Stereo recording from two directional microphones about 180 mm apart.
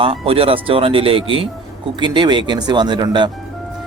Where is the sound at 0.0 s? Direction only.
30° right (ahead or behind).